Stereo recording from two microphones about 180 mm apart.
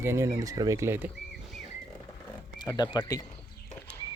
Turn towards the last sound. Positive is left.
turn(degrees=20)  # may be behind; listen again after turning